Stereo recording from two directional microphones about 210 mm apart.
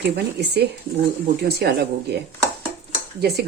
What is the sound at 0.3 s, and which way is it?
Dishes, 50° right (ahead or behind).